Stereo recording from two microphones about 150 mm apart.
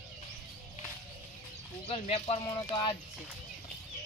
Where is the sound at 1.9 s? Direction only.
40° left (ahead or behind).